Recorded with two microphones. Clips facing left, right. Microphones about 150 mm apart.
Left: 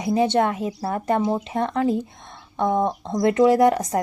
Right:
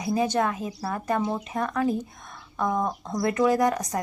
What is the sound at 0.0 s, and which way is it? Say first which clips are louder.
A woman's voice: left 5 dB; 25° left (ahead or behind).